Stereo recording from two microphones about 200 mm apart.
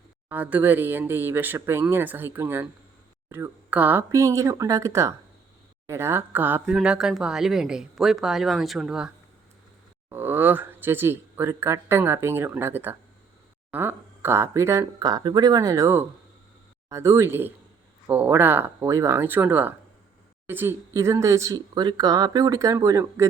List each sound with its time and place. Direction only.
0.3 s speech: 10° right (ahead or behind)